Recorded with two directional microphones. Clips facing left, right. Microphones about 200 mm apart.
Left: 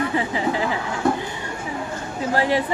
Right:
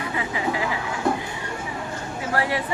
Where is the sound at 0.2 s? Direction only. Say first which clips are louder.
Left 3 dB; 30° left (ahead or behind).